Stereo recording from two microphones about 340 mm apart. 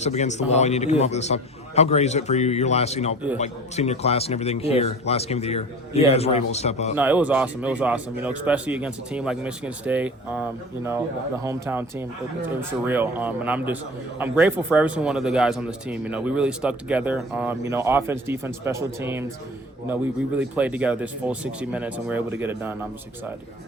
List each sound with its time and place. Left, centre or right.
0.0 s a man's voice: centre
6.9 s speech: centre
11.4 s speech: centre